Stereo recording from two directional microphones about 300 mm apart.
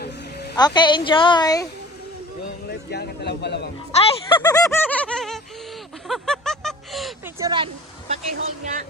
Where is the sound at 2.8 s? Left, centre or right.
Left.